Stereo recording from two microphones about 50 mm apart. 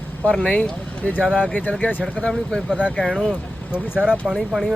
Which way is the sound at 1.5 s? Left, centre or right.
Left.